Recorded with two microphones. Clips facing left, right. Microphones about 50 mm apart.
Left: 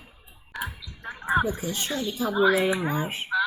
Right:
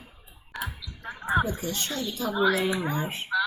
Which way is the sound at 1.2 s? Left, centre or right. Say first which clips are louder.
Left 1 dB; left.